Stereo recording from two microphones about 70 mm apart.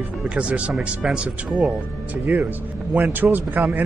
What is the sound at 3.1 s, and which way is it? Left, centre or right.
Speech, right.